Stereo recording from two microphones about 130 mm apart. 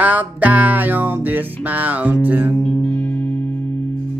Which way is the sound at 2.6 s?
10° left (ahead or behind).